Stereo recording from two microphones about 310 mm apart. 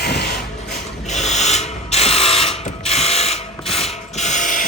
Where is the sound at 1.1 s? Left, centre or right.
Left.